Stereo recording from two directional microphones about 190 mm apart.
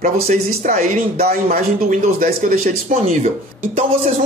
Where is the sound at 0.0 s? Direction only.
45° right (ahead or behind).